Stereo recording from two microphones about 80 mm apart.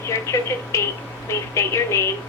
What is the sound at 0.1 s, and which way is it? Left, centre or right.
A woman's voice, left.